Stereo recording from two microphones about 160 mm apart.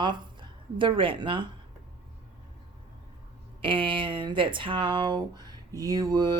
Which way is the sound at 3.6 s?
30° right (ahead or behind).